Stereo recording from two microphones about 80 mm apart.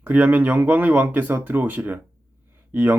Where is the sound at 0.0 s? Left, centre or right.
Right.